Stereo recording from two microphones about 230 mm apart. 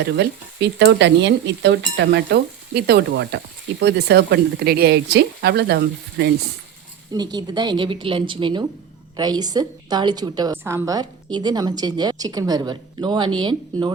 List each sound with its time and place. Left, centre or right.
0.0 s speech: right
7.1 s a woman's voice: centre